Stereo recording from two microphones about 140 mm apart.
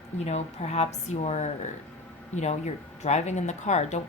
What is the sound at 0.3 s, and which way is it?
A woman's voice, 50° left (ahead or behind).